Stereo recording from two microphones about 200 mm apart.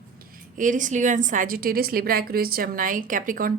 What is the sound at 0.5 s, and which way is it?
A woman's voice, 40° right (ahead or behind).